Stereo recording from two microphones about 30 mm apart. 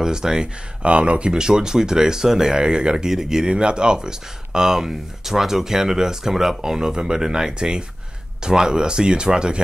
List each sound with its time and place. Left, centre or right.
0.0 s speech: right
0.8 s speech: right
1.3 s speech: right
3.1 s speech: centre
3.4 s speech: right; by 7.5 s centre
7.5 s speech: right